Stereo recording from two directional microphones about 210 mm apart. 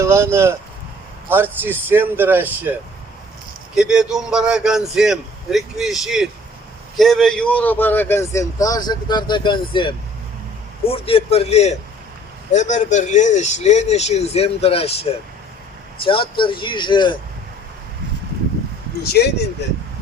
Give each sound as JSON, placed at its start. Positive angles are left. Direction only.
{"t": 0.0, "sound": "speech", "side_deg": -15}
{"t": 3.8, "sound": "a man's voice", "side_deg": -5}
{"t": 19.0, "sound": "speech", "side_deg": 50}